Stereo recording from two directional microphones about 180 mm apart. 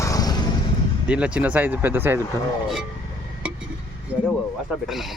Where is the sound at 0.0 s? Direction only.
20° left (ahead or behind).